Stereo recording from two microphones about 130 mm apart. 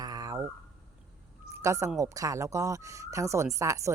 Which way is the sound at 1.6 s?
25° right (ahead or behind).